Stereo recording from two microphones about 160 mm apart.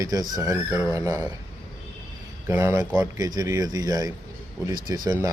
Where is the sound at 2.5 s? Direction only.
15° right (ahead or behind).